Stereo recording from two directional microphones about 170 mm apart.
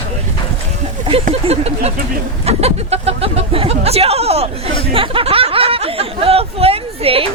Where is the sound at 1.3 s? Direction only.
35° right (ahead or behind).